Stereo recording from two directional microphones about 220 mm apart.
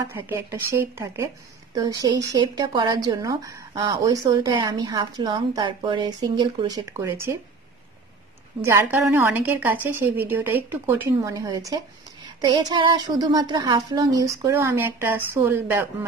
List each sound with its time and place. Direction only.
0.1 s a woman's voice: 10° right (ahead or behind)
8.5 s a woman's voice: 10° right (ahead or behind)